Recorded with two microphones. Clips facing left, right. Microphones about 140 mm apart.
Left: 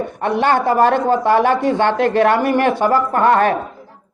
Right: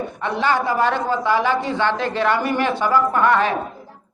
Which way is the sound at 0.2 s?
55° left (ahead or behind).